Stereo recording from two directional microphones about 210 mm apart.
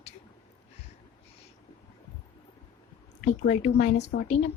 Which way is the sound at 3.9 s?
50° left (ahead or behind).